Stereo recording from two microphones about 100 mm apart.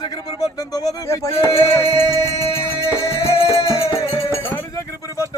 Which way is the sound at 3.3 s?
75° left (ahead or behind).